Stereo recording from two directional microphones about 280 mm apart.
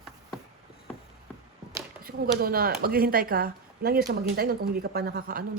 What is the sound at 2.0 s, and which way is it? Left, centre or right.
Speech, right.